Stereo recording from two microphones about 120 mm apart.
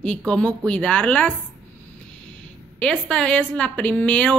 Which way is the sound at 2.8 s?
5° left (ahead or behind).